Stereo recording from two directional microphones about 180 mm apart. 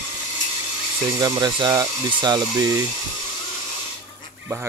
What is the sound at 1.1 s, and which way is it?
Speech, 20° right (ahead or behind).